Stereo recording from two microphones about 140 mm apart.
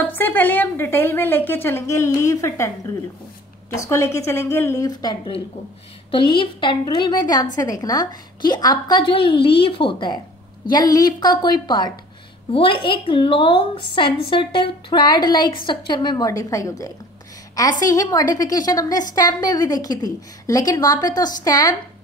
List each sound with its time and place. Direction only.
0.0 s a woman's voice: 15° left (ahead or behind)